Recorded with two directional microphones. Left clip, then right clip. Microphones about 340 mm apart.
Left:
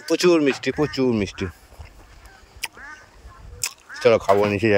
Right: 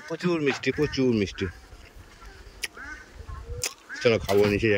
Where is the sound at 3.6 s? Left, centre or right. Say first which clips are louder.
Left 5 dB; centre.